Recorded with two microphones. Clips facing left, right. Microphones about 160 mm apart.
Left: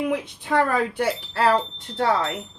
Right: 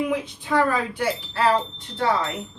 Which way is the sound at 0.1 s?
60° left (ahead or behind).